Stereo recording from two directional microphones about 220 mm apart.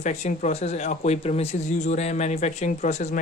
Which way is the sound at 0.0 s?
35° left (ahead or behind).